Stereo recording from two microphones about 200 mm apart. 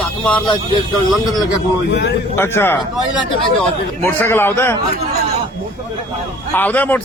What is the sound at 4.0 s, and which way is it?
Speech, 10° left (ahead or behind).